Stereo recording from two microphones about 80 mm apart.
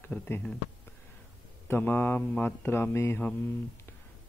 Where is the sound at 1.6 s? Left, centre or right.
Left.